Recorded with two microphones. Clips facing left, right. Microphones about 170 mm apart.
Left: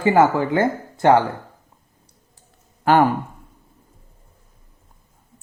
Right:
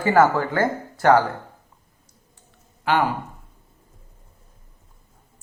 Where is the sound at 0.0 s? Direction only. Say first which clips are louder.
Left 2 dB; 15° left (ahead or behind).